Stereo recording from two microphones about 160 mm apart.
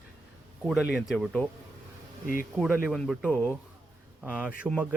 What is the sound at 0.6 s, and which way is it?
Speech, 5° right (ahead or behind).